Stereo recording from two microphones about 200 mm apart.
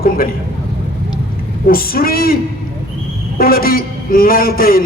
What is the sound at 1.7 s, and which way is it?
Speech, 50° left (ahead or behind).